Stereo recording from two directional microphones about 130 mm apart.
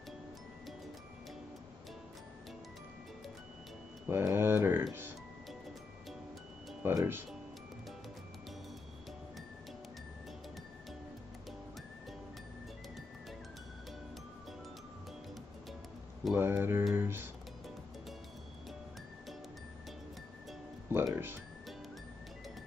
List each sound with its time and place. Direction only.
4.1 s speech: 20° right (ahead or behind)
6.8 s speech: 20° right (ahead or behind)
16.3 s speech: 20° right (ahead or behind)
20.9 s music: 20° right (ahead or behind)